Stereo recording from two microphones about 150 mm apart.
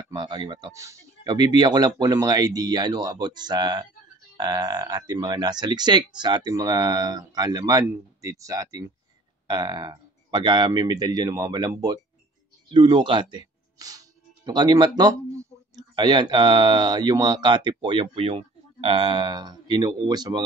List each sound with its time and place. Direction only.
0.1 s speech: 30° right (ahead or behind)